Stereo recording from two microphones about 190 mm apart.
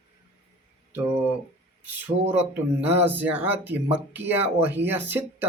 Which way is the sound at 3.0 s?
10° right (ahead or behind).